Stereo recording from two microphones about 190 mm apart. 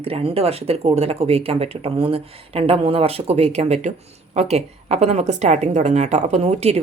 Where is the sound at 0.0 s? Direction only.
30° right (ahead or behind).